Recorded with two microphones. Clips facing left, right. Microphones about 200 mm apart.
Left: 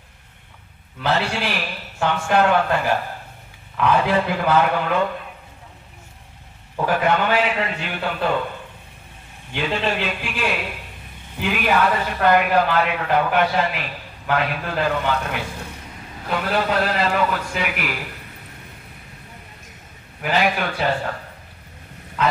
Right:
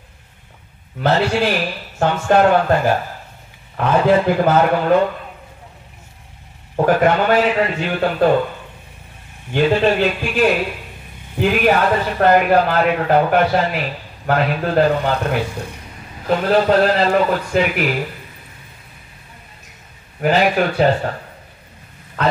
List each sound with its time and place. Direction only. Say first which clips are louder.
1.0 s a man's voice: right 6 dB; 45° right (ahead or behind)
6.8 s a man's voice: right 5 dB; 40° right (ahead or behind)
9.5 s a man's voice: right 8 dB; 45° right (ahead or behind)
20.2 s speech: right 6 dB; 40° right (ahead or behind)